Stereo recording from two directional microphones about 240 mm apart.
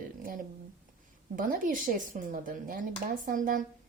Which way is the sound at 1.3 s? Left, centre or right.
Right.